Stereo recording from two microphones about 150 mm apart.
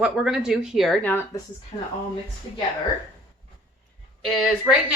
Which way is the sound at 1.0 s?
15° left (ahead or behind).